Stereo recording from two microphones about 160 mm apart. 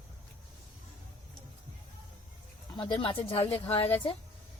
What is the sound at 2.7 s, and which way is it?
Speech, 30° left (ahead or behind).